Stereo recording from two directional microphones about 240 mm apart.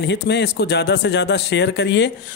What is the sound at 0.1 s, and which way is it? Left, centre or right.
Speech, left.